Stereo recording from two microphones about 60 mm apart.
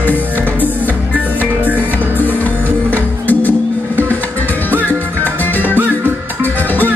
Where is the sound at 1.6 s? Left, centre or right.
Right.